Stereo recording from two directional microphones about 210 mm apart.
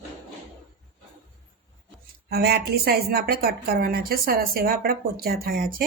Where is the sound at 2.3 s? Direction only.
50° right (ahead or behind).